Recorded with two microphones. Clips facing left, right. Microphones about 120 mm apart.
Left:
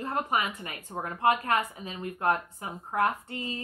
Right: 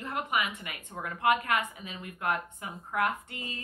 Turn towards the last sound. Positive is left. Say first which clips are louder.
# left 3 dB
turn(degrees=30)  # may be behind; listen again after turning